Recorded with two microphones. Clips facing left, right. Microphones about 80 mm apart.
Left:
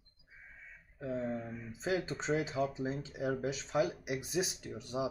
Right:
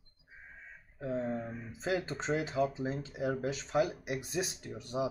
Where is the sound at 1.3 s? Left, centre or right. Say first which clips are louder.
Right 2 dB; right.